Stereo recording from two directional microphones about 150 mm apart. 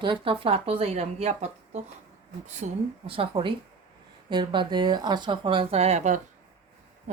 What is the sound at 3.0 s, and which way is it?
A woman's voice, 35° right (ahead or behind).